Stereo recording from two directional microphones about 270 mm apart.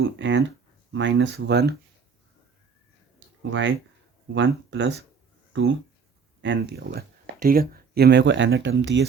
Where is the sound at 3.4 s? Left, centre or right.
Right.